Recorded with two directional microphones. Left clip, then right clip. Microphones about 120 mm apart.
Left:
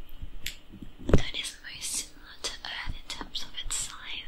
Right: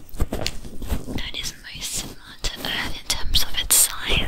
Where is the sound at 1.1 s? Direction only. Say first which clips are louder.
Left 3 dB; 25° right (ahead or behind).